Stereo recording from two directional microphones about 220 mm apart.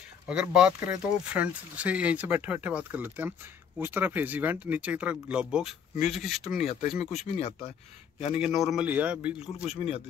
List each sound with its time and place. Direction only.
0.3 s speech: 5° right (ahead or behind)
6.4 s speech: 30° left (ahead or behind)
8.4 s speech: centre (ahead or behind)
9.7 s speech: 25° left (ahead or behind)